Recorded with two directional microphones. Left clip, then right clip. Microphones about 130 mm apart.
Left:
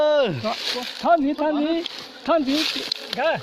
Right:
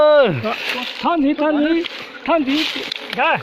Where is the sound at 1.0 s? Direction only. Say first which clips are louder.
Right 1 dB; 90° left.